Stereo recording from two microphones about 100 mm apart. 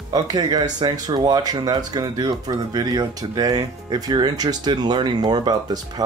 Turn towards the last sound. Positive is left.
turn(degrees=-45)  # may be behind; listen again after turning